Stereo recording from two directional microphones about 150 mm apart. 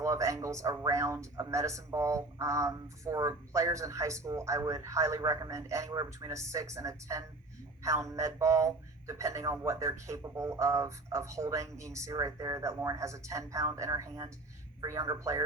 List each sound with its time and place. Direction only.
0.0 s speech: 20° right (ahead or behind)